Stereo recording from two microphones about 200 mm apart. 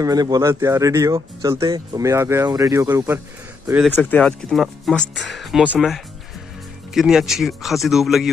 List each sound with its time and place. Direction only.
0.0 s speech: 20° right (ahead or behind)
3.8 s speech: 10° left (ahead or behind)